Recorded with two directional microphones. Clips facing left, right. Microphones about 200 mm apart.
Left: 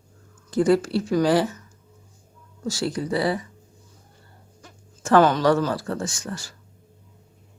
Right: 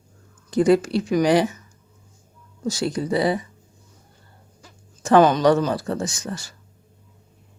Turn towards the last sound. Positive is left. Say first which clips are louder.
# right 2 dB
turn(degrees=-20)  # may be behind; listen again after turning